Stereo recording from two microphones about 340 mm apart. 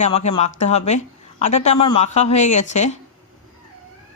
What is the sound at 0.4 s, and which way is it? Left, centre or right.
A woman's voice, centre.